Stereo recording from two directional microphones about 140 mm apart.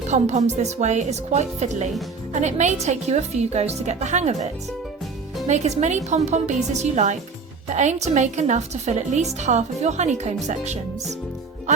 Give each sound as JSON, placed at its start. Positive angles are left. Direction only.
{"t": 0.1, "sound": "a woman's voice", "side_deg": -55}
{"t": 5.5, "sound": "a woman's voice", "side_deg": -55}